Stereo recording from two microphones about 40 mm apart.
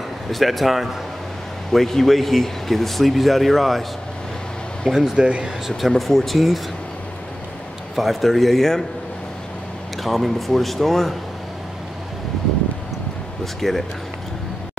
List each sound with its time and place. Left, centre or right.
0.3 s speech: centre
4.9 s speech: centre
5.2 s speech: right
5.7 s speech: centre
7.9 s speech: centre
10.0 s speech: centre
13.4 s speech: centre